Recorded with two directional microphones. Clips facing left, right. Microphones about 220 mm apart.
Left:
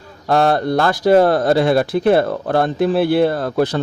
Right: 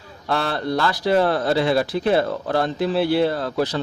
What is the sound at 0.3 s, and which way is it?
A man's voice, 45° left (ahead or behind).